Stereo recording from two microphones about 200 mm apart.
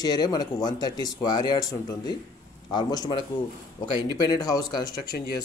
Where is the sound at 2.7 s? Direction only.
20° left (ahead or behind).